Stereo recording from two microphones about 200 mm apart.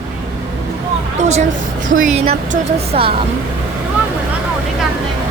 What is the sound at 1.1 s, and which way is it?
Speech, 35° right (ahead or behind).